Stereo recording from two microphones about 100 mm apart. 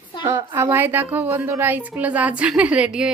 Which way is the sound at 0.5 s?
20° right (ahead or behind).